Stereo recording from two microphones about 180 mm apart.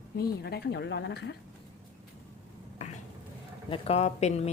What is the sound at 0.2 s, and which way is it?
A woman's voice, 65° left (ahead or behind).